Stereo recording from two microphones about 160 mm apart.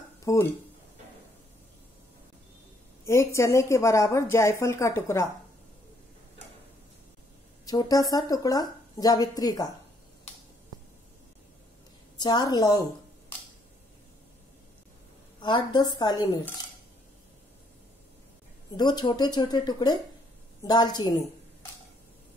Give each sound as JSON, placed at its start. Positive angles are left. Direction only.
{"t": 0.2, "sound": "speech", "side_deg": 20}
{"t": 3.1, "sound": "a woman's voice", "side_deg": 20}
{"t": 7.6, "sound": "a woman's voice", "side_deg": 20}
{"t": 12.2, "sound": "a woman's voice", "side_deg": 25}
{"t": 15.4, "sound": "a woman's voice", "side_deg": 30}
{"t": 18.8, "sound": "a woman's voice", "side_deg": 25}